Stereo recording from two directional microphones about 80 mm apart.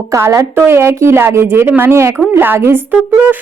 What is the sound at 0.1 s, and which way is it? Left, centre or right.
A woman's voice, right.